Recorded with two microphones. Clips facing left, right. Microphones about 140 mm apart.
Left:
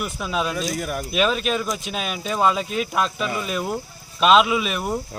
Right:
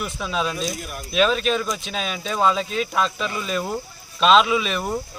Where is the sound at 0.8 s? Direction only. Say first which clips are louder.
Left 7 dB; 55° left (ahead or behind).